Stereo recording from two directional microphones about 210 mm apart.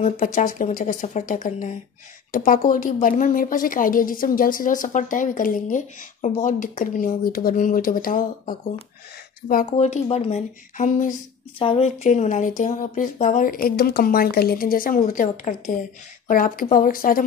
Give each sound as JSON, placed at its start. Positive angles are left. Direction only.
{"t": 0.0, "sound": "a woman's voice", "side_deg": 35}
{"t": 9.7, "sound": "a woman's voice", "side_deg": 30}
{"t": 11.5, "sound": "a woman's voice", "side_deg": 25}